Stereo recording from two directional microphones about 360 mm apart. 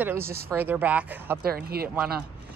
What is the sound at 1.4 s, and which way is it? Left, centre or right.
Speech, right.